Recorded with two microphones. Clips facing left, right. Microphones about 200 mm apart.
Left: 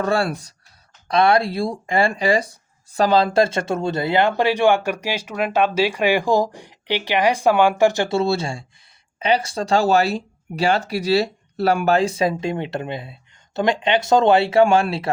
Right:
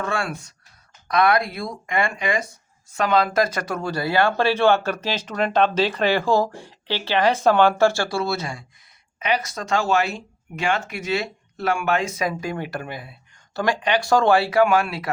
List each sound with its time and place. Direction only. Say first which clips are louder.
0.0 s speech: left 6 dB; 35° left (ahead or behind)